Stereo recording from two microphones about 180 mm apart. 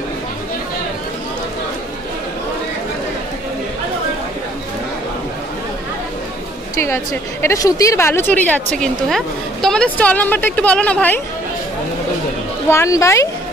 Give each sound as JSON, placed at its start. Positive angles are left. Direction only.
{"t": 7.4, "sound": "a woman's voice", "side_deg": 20}
{"t": 12.6, "sound": "a woman's voice", "side_deg": 15}